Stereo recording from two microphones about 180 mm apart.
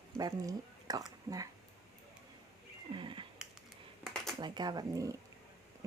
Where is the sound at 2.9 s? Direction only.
25° right (ahead or behind).